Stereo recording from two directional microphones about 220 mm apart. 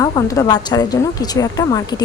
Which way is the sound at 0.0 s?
15° left (ahead or behind).